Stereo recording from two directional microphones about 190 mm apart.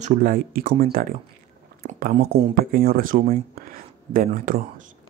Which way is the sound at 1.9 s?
40° right (ahead or behind).